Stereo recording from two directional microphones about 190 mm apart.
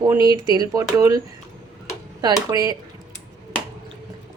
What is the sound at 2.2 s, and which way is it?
Speech, 20° right (ahead or behind).